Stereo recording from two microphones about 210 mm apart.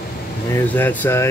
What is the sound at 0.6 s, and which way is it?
Speech, 10° left (ahead or behind).